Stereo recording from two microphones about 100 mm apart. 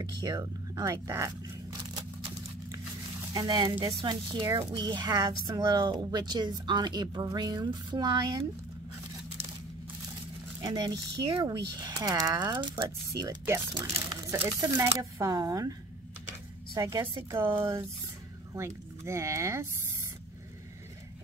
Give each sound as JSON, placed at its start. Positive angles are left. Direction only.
{"t": 0.0, "sound": "speech", "side_deg": -45}
{"t": 3.3, "sound": "speech", "side_deg": -40}
{"t": 10.6, "sound": "speech", "side_deg": -50}
{"t": 14.3, "sound": "speech", "side_deg": -25}
{"t": 16.7, "sound": "speech", "side_deg": -35}
{"t": 17.3, "sound": "speech", "side_deg": -25}